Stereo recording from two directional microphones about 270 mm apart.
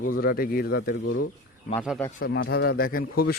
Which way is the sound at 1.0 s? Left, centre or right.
Left.